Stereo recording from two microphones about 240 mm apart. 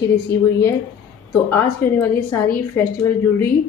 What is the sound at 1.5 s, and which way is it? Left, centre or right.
Speech, centre.